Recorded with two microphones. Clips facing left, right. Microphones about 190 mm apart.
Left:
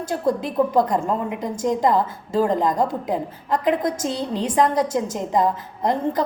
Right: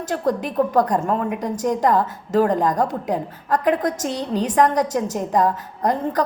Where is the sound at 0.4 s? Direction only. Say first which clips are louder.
Right 1 dB; 25° left (ahead or behind).